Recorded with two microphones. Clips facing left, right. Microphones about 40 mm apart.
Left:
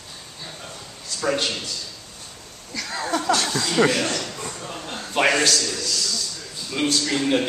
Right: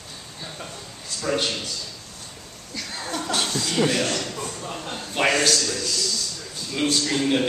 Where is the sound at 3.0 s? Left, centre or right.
Left.